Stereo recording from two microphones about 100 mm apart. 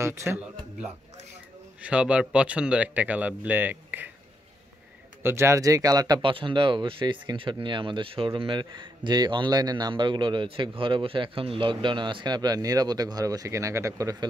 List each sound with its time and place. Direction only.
0.0 s speech: 30° right (ahead or behind)
1.8 s speech: 10° right (ahead or behind)
5.2 s speech: 25° right (ahead or behind)
6.2 s speech: 55° right (ahead or behind); by 14.1 s 35° right (ahead or behind)